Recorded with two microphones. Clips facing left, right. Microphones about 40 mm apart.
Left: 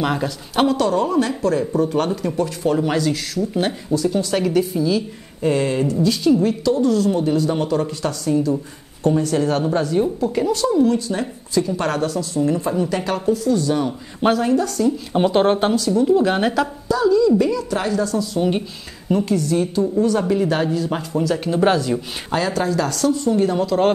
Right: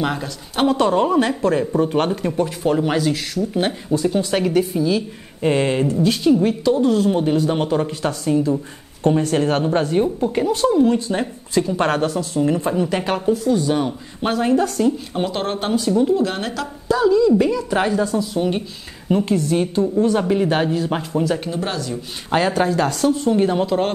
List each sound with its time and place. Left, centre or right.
0.0 s a woman's voice: centre
0.7 s speech: right
3.9 s speech: right
5.4 s speech: right
9.0 s speech: right
13.2 s speech: centre; by 15.0 s right
15.1 s speech: centre
15.7 s speech: right
16.2 s speech: centre
16.9 s speech: right
19.2 s speech: right
21.1 s speech: centre
21.5 s speech: centre
22.3 s speech: right